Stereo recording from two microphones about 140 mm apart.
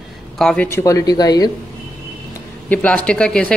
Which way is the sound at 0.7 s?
25° left (ahead or behind).